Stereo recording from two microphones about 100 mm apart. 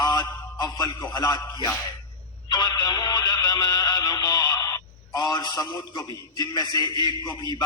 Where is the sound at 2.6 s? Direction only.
40° left (ahead or behind).